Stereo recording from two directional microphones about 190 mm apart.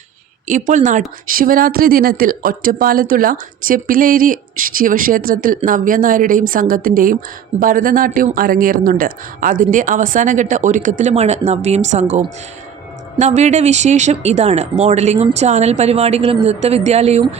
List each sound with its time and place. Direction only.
0.4 s speech: 40° right (ahead or behind)